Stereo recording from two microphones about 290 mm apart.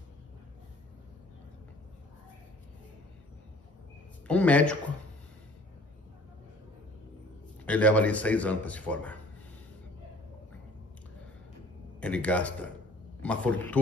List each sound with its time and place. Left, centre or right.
4.3 s speech: centre
7.6 s speech: centre
12.0 s speech: centre